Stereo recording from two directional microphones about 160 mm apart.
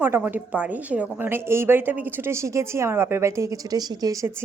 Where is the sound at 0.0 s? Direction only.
15° right (ahead or behind).